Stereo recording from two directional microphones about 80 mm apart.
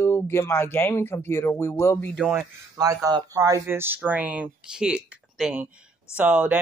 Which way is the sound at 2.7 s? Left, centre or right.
Right.